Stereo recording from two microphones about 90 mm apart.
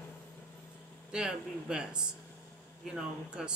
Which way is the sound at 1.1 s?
10° right (ahead or behind).